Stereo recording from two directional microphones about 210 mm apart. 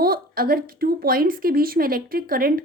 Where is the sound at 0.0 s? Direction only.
45° right (ahead or behind).